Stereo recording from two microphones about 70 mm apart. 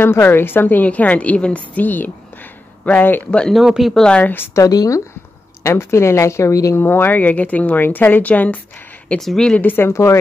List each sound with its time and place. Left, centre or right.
0.0 s a woman's voice: left; by 3.5 s centre
3.5 s speech: centre
3.9 s speech: centre
4.2 s a woman's voice: left
4.6 s speech: left
5.6 s speech: left
6.7 s a woman's voice: left
9.2 s speech: centre
9.6 s speech: left